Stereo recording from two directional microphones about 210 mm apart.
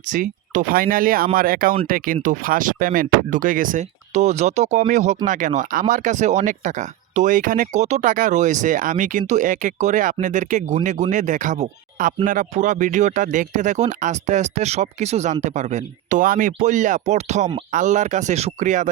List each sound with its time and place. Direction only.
0.1 s speech: 40° right (ahead or behind)